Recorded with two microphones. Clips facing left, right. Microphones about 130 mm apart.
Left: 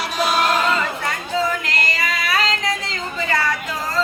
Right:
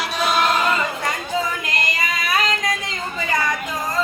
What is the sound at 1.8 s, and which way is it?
Female singing, 20° right (ahead or behind).